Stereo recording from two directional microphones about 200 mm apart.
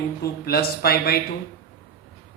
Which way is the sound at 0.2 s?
50° left (ahead or behind).